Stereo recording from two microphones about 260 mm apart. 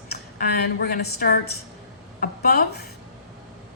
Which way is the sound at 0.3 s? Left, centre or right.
Left.